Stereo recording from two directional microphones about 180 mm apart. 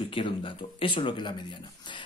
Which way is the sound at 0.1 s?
30° left (ahead or behind).